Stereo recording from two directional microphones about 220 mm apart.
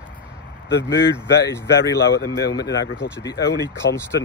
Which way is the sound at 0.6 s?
50° left (ahead or behind).